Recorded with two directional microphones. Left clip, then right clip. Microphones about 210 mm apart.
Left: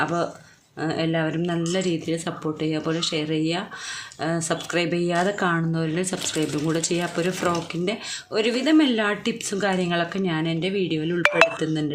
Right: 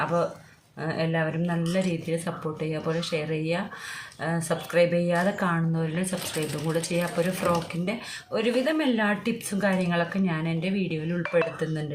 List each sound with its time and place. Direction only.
0.0 s speech: 35° left (ahead or behind)
7.4 s speech: 35° left (ahead or behind)